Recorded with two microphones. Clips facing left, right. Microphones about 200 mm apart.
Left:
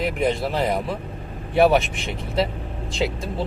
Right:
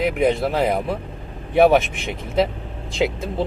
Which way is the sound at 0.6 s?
10° right (ahead or behind).